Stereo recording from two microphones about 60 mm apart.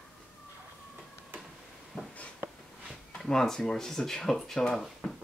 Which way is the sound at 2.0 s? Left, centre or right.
Centre.